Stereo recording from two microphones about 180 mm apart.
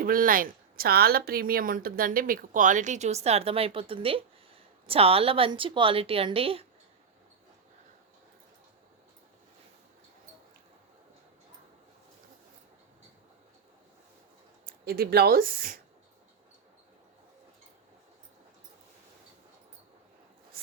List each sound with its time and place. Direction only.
0.0 s a woman's voice: 50° right (ahead or behind); by 6.7 s 30° right (ahead or behind)
14.8 s speech: 60° right (ahead or behind)